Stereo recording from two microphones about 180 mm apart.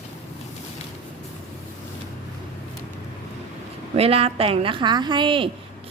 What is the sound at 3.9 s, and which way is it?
A woman's voice, 35° right (ahead or behind).